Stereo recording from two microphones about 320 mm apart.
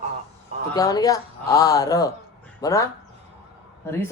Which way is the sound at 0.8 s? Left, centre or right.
Centre.